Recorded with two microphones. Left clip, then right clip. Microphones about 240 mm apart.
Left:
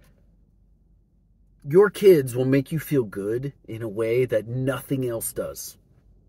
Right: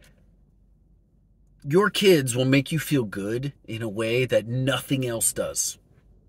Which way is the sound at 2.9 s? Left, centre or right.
Right.